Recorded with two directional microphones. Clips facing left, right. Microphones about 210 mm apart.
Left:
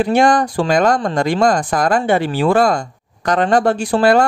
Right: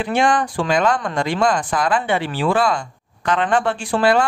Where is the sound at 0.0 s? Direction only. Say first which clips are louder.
Left 5 dB; 40° left (ahead or behind).